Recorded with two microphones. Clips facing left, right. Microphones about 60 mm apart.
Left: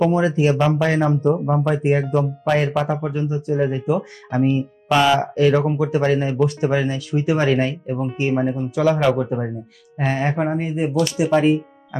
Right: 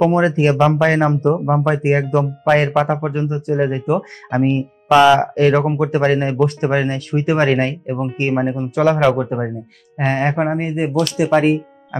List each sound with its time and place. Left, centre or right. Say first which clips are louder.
0.0 s speech: right 3 dB; right
1.5 s speech: right 3 dB; right
2.7 s speech: right 4 dB; right
5.1 s speech: right 3 dB; right